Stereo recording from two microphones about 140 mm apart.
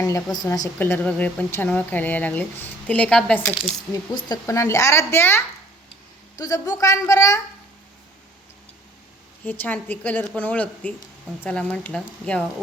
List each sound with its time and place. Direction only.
0.0 s a woman's voice: 25° left (ahead or behind)
0.8 s speech: 15° left (ahead or behind)
4.1 s a woman's voice: 25° left (ahead or behind)
9.4 s speech: 10° left (ahead or behind)